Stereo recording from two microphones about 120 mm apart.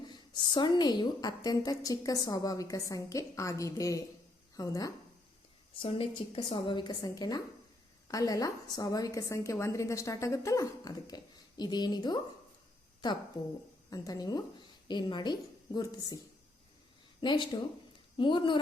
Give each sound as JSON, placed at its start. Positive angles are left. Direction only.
{"t": 0.1, "sound": "a woman's voice", "side_deg": 40}
{"t": 5.8, "sound": "a woman's voice", "side_deg": 45}
{"t": 13.4, "sound": "a woman's voice", "side_deg": 30}